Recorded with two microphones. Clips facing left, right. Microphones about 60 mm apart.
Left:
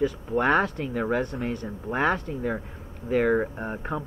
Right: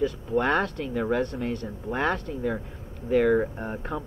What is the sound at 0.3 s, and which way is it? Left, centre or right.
Speech, centre.